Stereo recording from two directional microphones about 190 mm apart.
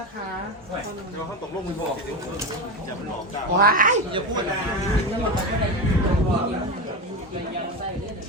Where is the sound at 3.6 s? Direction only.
45° right (ahead or behind).